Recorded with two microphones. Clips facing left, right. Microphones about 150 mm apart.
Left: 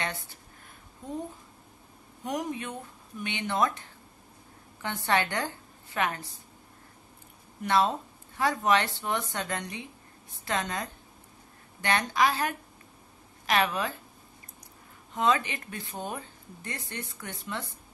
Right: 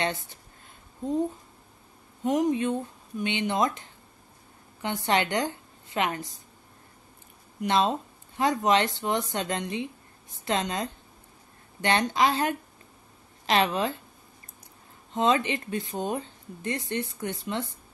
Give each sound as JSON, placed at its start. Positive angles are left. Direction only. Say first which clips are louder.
{"t": 0.0, "sound": "speech", "louder": "right 6 dB", "side_deg": -20}
{"t": 2.2, "sound": "a woman's voice", "louder": "right 9 dB", "side_deg": -25}
{"t": 7.6, "sound": "speech", "louder": "right 1 dB", "side_deg": -20}
{"t": 15.1, "sound": "speech", "louder": "right 3 dB", "side_deg": -25}